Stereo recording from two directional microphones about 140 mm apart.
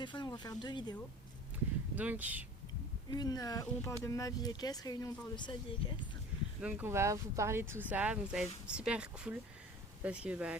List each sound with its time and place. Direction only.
0.0 s speech: 30° left (ahead or behind)
2.0 s speech: 10° right (ahead or behind)
3.1 s speech: 30° left (ahead or behind)
6.6 s speech: 10° right (ahead or behind)